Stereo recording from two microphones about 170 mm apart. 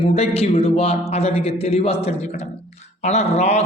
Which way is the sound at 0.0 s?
35° left (ahead or behind).